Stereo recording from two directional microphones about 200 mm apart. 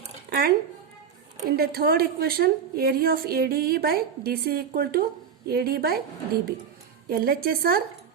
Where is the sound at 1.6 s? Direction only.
50° right (ahead or behind).